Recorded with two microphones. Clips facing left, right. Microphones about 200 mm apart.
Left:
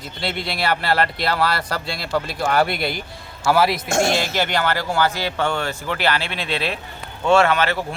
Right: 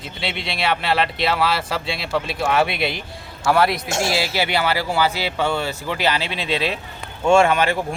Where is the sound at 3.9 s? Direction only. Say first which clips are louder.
Left 4 dB; 50° left (ahead or behind).